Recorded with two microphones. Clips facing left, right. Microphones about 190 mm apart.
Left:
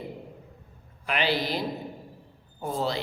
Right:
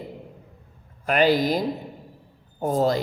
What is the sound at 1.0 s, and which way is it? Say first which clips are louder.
Speech: right 8 dB; 45° right (ahead or behind).